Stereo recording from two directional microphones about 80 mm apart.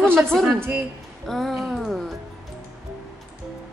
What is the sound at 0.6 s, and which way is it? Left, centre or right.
Speech, right.